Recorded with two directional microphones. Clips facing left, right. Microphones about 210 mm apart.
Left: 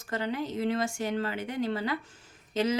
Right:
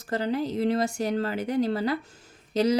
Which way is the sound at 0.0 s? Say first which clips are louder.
Right 5 dB; 35° right (ahead or behind).